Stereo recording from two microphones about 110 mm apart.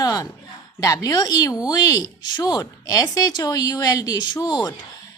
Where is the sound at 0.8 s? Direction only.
35° left (ahead or behind).